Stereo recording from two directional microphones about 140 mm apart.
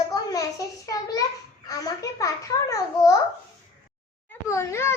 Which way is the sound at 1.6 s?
25° left (ahead or behind).